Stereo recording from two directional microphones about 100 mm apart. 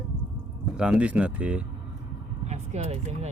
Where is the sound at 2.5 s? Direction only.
90° right.